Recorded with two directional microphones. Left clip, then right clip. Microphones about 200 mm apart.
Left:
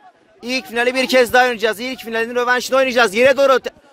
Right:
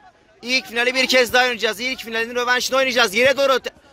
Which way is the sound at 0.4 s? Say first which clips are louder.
Left 1 dB; 40° left (ahead or behind).